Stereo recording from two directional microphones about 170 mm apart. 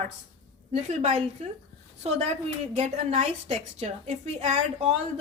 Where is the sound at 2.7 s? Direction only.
40° right (ahead or behind).